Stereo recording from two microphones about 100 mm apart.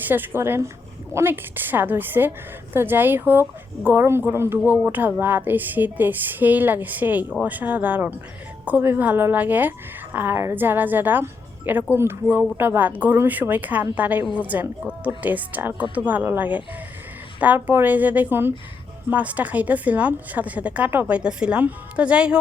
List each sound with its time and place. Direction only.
0.0 s a woman's voice: 20° right (ahead or behind)